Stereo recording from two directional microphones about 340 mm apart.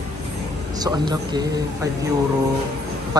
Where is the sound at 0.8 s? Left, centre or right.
Centre.